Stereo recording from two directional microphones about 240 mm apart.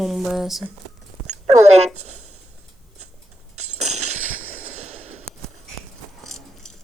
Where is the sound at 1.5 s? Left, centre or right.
Right.